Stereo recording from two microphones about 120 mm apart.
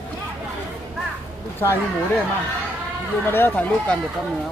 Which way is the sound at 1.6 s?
20° left (ahead or behind).